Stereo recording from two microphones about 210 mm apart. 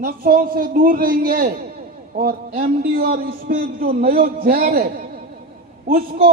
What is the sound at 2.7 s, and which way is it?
A man's voice, 45° right (ahead or behind).